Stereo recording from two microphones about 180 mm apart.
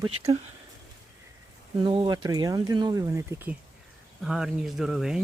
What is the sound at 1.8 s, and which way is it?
Speech, 25° right (ahead or behind).